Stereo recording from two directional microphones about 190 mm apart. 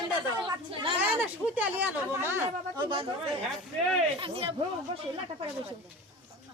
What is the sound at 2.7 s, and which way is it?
Speech, 25° right (ahead or behind).